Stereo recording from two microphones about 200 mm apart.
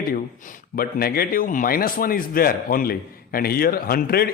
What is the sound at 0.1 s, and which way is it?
A man's voice, 45° left (ahead or behind).